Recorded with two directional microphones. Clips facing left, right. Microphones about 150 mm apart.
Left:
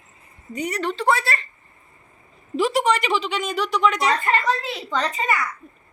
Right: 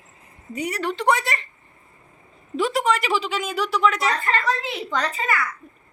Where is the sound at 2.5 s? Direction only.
Centre (ahead or behind).